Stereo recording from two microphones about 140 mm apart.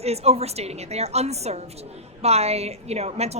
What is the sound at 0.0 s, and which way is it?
A woman's voice, 50° right (ahead or behind).